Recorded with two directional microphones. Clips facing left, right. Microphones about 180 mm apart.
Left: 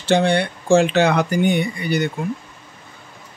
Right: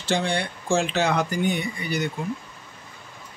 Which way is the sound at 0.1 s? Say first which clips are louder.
Left 8 dB; 65° left (ahead or behind).